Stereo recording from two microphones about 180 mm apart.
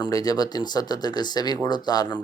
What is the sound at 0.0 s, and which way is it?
Speech, 20° left (ahead or behind).